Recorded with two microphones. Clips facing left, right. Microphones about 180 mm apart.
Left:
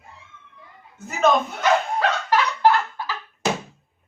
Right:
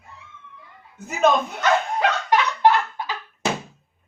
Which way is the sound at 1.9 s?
20° right (ahead or behind).